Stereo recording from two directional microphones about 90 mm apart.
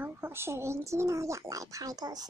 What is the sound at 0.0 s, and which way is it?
Speech, 25° right (ahead or behind).